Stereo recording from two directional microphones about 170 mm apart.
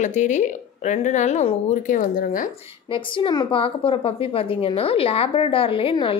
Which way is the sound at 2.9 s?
30° left (ahead or behind).